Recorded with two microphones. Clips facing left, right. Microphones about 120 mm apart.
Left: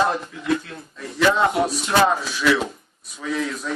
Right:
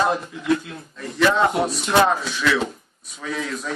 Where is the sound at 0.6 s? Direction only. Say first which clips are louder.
Right 1 dB; 5° right (ahead or behind).